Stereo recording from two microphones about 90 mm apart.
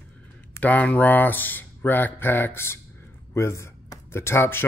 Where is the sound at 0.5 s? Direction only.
15° left (ahead or behind).